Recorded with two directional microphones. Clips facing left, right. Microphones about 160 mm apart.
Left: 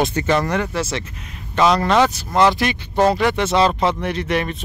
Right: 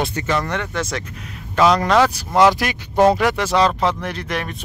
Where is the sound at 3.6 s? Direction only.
5° left (ahead or behind).